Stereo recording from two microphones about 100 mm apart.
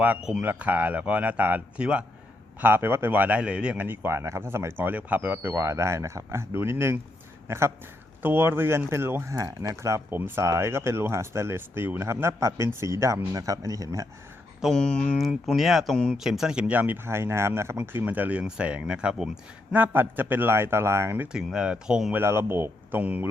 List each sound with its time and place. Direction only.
0.0 s speech: 10° right (ahead or behind)
0.4 s speech: 15° right (ahead or behind)
9.3 s speech: 35° right (ahead or behind)
14.7 s speech: 10° left (ahead or behind)
15.2 s speech: centre (ahead or behind)
19.7 s speech: 20° right (ahead or behind)
21.3 s speech: 5° right (ahead or behind)
22.1 s speech: 25° right (ahead or behind)